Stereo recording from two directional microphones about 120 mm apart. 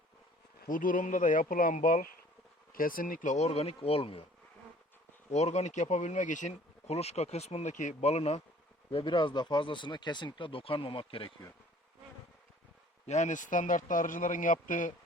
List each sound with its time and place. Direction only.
0.8 s a man's voice: 90° left
3.2 s speech: 80° left; by 4.2 s 50° left (ahead or behind)
5.3 s speech: 65° left (ahead or behind)
8.9 s speech: 45° left (ahead or behind)
13.1 s a man's voice: 85° left